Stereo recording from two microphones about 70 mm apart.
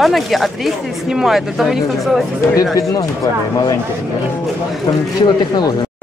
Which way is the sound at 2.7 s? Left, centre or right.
Left.